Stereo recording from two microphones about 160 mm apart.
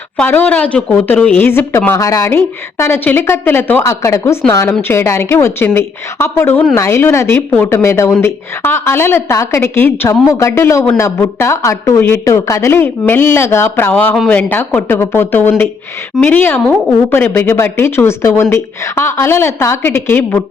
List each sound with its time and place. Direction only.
0.2 s a woman's voice: 10° left (ahead or behind)